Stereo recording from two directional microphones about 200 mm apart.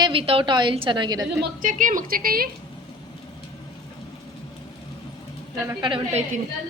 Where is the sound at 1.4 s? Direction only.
40° right (ahead or behind).